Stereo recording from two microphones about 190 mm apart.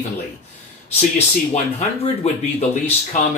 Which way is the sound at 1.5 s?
35° left (ahead or behind).